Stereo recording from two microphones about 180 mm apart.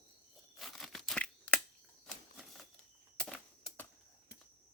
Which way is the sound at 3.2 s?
5° left (ahead or behind).